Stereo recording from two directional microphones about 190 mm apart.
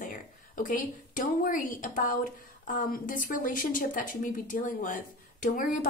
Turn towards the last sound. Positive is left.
turn(degrees=45)  # may be behind; listen again after turning